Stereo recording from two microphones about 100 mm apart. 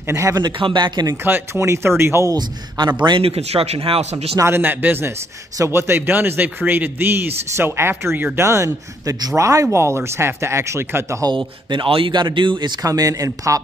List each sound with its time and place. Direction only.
0.0 s speech: 30° right (ahead or behind)
0.4 s speech: 55° right (ahead or behind)
1.2 s speech: 25° right (ahead or behind)
2.8 s speech: 50° right (ahead or behind)
3.2 s speech: 85° right
4.4 s speech: 20° right (ahead or behind)
11.2 s speech: 55° right (ahead or behind); by 13.6 s 35° right (ahead or behind)